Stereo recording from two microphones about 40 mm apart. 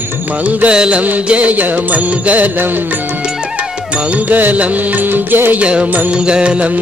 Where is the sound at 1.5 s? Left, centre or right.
Right.